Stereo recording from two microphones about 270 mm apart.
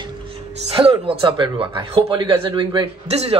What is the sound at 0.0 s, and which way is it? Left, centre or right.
Speech, centre.